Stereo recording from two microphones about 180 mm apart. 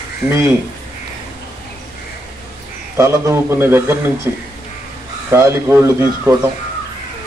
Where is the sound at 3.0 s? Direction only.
15° right (ahead or behind).